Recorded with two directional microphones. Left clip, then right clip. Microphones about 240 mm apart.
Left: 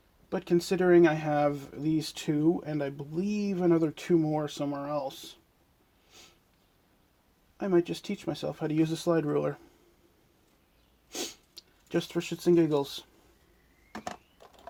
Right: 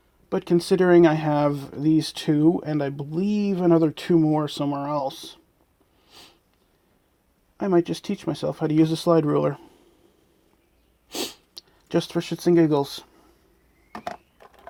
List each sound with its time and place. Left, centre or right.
0.3 s speech: right
6.1 s sniff: right
7.6 s speech: right
11.1 s sniff: right
11.9 s speech: right